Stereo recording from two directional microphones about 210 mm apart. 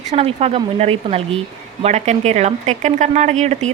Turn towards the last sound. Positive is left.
turn(degrees=-35)  # may be behind; listen again after turning